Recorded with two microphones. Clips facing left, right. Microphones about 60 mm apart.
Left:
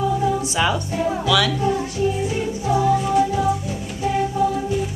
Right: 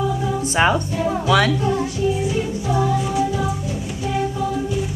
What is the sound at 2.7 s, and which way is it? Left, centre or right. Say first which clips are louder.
Music: left 3 dB; centre.